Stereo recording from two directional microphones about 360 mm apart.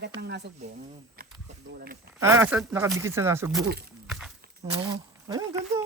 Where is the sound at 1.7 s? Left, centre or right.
Right.